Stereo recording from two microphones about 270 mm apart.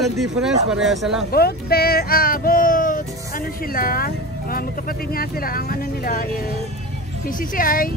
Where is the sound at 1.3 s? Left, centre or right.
Left.